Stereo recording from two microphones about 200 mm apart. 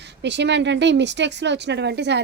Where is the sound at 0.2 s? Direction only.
60° right (ahead or behind).